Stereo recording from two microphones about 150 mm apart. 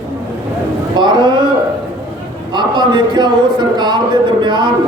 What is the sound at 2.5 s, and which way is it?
Speech, 30° right (ahead or behind).